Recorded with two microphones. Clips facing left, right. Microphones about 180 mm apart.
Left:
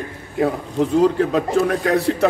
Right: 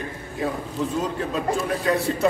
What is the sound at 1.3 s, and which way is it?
Speech, 70° left (ahead or behind).